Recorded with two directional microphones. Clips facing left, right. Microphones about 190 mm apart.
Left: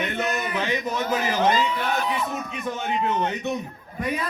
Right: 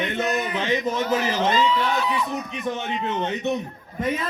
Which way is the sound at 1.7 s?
55° left (ahead or behind).